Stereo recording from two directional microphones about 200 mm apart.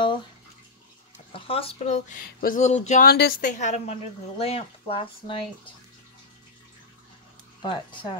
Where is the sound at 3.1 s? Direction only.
55° left (ahead or behind).